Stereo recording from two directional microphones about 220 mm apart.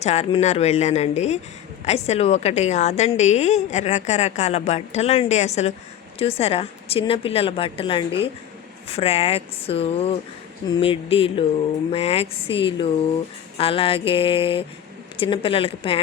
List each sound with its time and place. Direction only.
0.0 s a woman's voice: 30° left (ahead or behind)